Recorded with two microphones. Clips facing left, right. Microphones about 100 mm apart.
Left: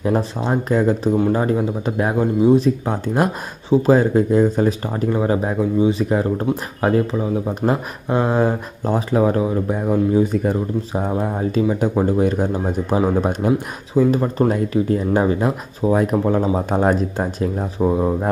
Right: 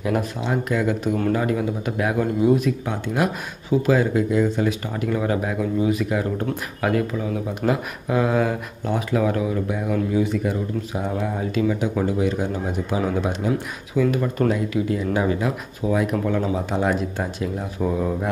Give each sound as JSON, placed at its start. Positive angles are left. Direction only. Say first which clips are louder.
{"t": 0.0, "sound": "speech", "louder": "left 4 dB", "side_deg": 30}
{"t": 12.2, "sound": "speech", "louder": "left 4 dB", "side_deg": 45}